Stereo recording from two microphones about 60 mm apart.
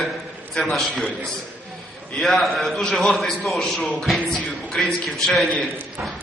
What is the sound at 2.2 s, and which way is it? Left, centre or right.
A man's voice, centre.